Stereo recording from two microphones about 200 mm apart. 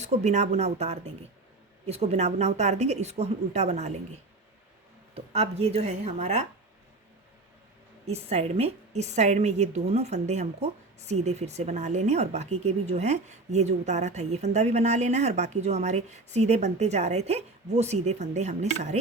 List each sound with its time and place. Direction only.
0.0 s a woman's voice: 35° right (ahead or behind)
5.1 s a woman's voice: 30° right (ahead or behind)
8.0 s a woman's voice: 30° right (ahead or behind)